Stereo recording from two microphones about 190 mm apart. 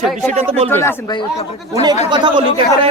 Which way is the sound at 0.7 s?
10° left (ahead or behind).